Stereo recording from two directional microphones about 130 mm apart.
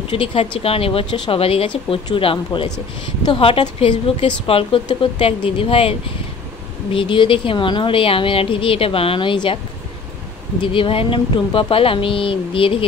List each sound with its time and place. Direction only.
0.1 s a woman's voice: 40° left (ahead or behind)
10.6 s a woman's voice: 40° left (ahead or behind)